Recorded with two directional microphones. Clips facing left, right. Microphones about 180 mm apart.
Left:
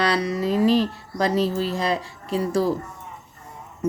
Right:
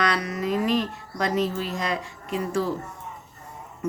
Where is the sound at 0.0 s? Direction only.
30° left (ahead or behind).